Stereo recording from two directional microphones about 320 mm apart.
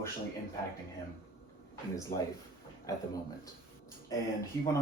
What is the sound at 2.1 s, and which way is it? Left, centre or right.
Speech, left.